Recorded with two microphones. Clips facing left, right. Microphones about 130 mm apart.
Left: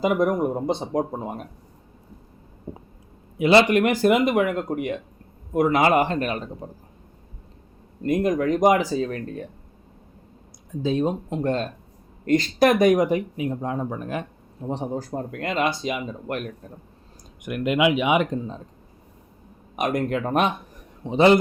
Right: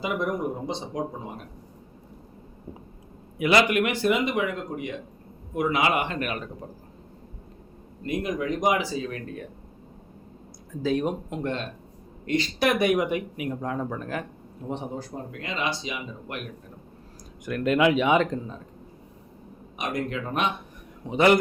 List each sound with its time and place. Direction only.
0.0 s speech: 45° left (ahead or behind)
3.3 s speech: 25° left (ahead or behind); by 4.9 s 55° left (ahead or behind)
5.5 s speech: 45° left (ahead or behind)
8.0 s speech: 45° left (ahead or behind)
10.7 s speech: 25° left (ahead or behind)
11.4 s speech: 40° left (ahead or behind); by 14.3 s 20° left (ahead or behind)
14.7 s speech: 40° left (ahead or behind)
17.4 s speech: 15° left (ahead or behind)
19.7 s speech: 50° left (ahead or behind)
21.0 s speech: 25° left (ahead or behind)